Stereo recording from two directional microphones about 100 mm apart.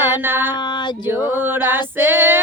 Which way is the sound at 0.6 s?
50° left (ahead or behind).